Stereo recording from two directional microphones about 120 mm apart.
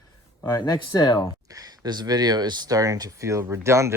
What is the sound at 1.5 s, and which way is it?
Speech, 30° right (ahead or behind).